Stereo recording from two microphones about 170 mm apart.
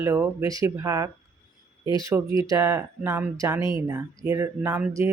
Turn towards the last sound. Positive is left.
turn(degrees=-10)  # may be behind; listen again after turning